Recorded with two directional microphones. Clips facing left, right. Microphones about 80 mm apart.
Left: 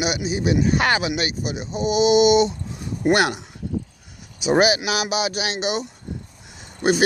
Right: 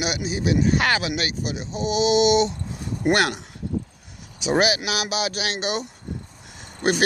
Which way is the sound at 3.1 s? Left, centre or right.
Centre.